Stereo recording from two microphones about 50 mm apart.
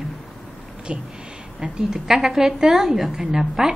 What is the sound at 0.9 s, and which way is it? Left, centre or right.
A woman's voice, centre.